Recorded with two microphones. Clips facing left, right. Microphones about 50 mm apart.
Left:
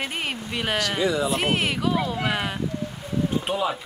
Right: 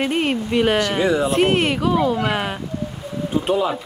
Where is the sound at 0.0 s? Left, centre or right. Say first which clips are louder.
Right 9 dB; centre.